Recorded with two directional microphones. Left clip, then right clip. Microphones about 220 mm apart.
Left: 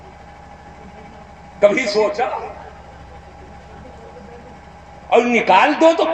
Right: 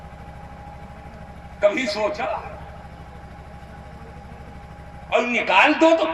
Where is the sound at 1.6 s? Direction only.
25° left (ahead or behind).